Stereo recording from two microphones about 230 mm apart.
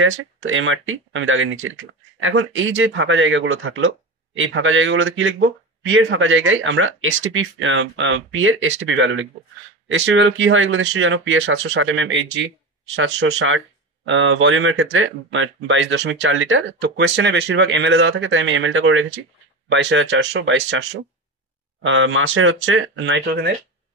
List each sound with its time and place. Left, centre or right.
0.0 s speech: right
21.8 s speech: right